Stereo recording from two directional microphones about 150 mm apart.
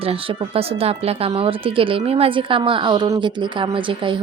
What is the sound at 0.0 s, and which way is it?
Speech, 40° right (ahead or behind).